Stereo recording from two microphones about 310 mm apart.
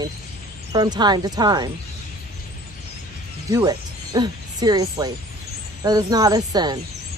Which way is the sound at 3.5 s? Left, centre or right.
Centre.